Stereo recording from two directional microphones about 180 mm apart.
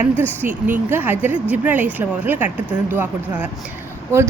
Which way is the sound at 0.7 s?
10° right (ahead or behind).